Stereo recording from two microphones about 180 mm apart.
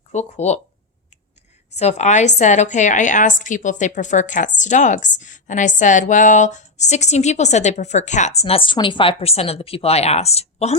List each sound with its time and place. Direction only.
0.1 s a woman's voice: 40° left (ahead or behind)
1.7 s a woman's voice: 35° left (ahead or behind)